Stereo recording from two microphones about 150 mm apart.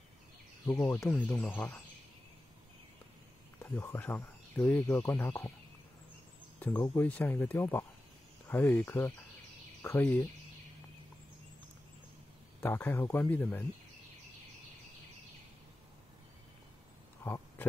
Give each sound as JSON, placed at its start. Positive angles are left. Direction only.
{"t": 0.7, "sound": "speech", "side_deg": 15}
{"t": 3.7, "sound": "speech", "side_deg": 15}
{"t": 6.6, "sound": "speech", "side_deg": 10}
{"t": 12.5, "sound": "speech", "side_deg": 15}
{"t": 17.2, "sound": "a sound", "side_deg": 15}